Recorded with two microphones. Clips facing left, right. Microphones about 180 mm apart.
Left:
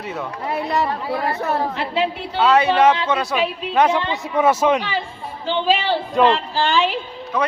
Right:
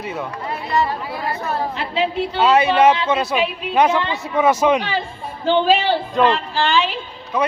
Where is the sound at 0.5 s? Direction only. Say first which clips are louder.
Even; 70° left (ahead or behind).